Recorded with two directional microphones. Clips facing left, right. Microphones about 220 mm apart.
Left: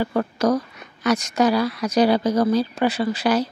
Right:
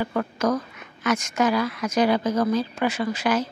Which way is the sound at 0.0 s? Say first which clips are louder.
Left 3 dB; 35° left (ahead or behind).